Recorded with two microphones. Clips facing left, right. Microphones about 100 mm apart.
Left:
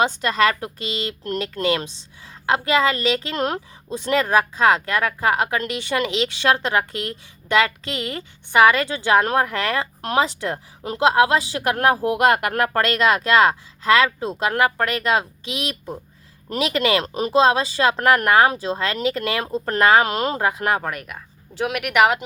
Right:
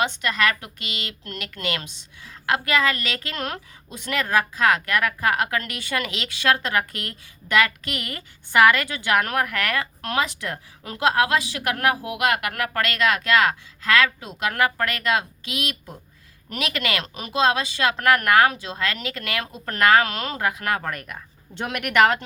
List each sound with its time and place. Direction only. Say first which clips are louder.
0.0 s speech: left 4 dB; 35° left (ahead or behind)
20.8 s speech: left 2 dB; 5° left (ahead or behind)